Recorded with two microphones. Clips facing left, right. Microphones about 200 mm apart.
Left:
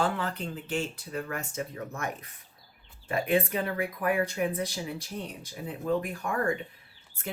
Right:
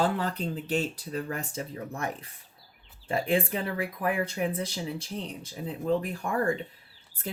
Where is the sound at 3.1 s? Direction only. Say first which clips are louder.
Even; 30° right (ahead or behind).